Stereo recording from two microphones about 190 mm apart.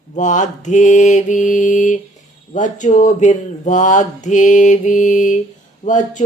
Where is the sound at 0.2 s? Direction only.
40° left (ahead or behind).